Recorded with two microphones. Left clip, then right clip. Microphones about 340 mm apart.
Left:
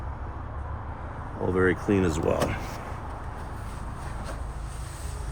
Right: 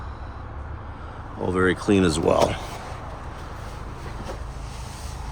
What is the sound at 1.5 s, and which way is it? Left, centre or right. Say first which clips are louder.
Speech: right 3 dB; centre.